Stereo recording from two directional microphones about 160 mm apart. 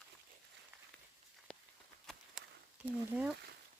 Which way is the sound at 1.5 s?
5° left (ahead or behind).